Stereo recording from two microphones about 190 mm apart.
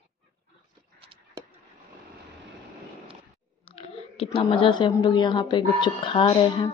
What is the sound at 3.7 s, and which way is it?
Speech, 30° left (ahead or behind).